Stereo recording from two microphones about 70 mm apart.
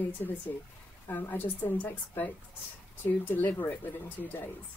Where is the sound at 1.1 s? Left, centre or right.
Left.